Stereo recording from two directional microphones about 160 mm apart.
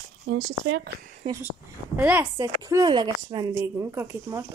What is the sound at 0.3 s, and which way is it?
Speech, 75° right (ahead or behind).